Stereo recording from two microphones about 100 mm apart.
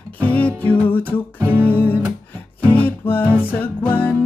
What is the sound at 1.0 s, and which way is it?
Music, 20° right (ahead or behind).